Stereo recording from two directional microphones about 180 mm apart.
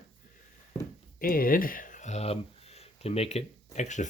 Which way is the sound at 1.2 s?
55° left (ahead or behind).